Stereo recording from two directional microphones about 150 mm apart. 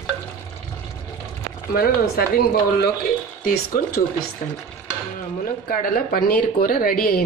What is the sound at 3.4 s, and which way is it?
Speech, 70° left (ahead or behind).